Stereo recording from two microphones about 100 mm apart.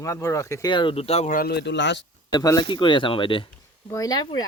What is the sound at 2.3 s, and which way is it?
Speech, 35° left (ahead or behind).